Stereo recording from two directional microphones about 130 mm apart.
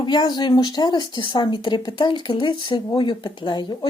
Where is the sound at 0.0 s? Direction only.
35° left (ahead or behind).